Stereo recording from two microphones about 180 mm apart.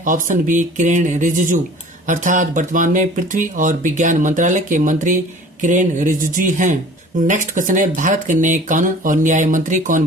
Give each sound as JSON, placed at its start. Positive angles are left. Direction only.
{"t": 0.0, "sound": "speech", "side_deg": -45}